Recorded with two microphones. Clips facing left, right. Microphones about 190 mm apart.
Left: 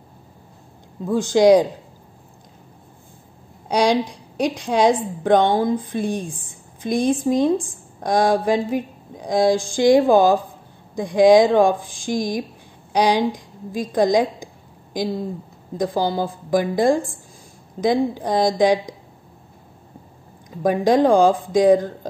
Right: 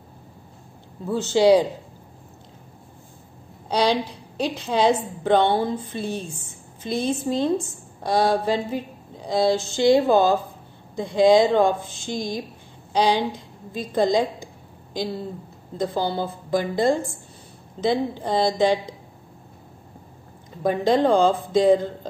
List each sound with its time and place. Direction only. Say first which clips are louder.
1.0 s a woman's voice: left 3 dB; 15° left (ahead or behind)
3.9 s a woman's voice: left 4 dB; 15° left (ahead or behind)
15.8 s a woman's voice: left 3 dB; 15° left (ahead or behind)
20.6 s a woman's voice: left 3 dB; 15° left (ahead or behind)